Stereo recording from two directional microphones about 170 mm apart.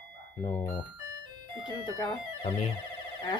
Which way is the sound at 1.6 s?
25° left (ahead or behind).